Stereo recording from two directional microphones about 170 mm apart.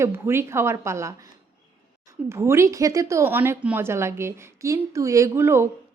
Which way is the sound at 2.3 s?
15° right (ahead or behind).